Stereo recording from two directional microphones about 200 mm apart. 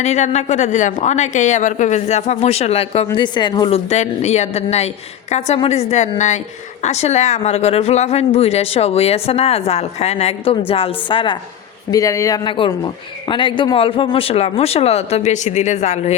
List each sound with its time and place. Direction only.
0.0 s speech: 35° left (ahead or behind)
3.8 s speech: 35° left (ahead or behind)